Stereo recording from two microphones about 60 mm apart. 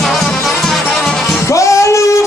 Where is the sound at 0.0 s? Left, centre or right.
Centre.